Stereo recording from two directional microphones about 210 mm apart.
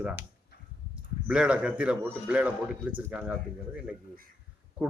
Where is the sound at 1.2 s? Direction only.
5° right (ahead or behind).